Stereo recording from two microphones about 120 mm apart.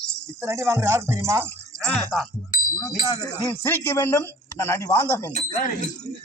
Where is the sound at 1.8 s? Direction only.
5° left (ahead or behind).